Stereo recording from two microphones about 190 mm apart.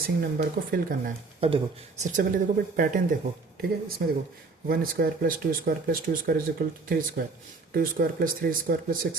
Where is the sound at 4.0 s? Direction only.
50° right (ahead or behind).